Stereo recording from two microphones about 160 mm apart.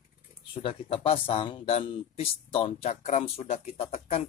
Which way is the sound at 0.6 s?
35° left (ahead or behind).